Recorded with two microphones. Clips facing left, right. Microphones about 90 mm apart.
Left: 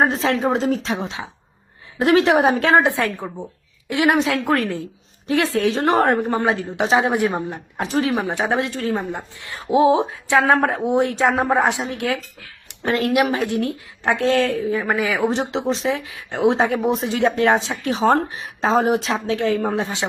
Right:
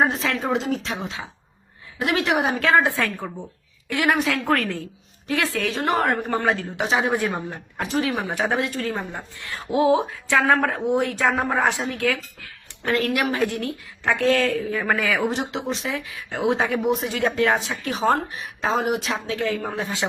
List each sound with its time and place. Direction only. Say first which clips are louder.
0.0 s a woman's voice: left 4 dB; 35° left (ahead or behind)
2.0 s a woman's voice: left 7 dB; 35° left (ahead or behind)
6.1 s speech: left 3 dB; 20° left (ahead or behind)
6.7 s a woman's voice: left 4 dB; 30° left (ahead or behind)
7.1 s a woman's voice: left 4 dB; 20° left (ahead or behind)
7.9 s a woman's voice: left 3 dB; 30° left (ahead or behind)
12.6 s a sound: left 2 dB; 20° left (ahead or behind)
13.3 s a woman's voice: left 3 dB; 20° left (ahead or behind)
15.3 s a woman's voice: left 5 dB; 35° left (ahead or behind)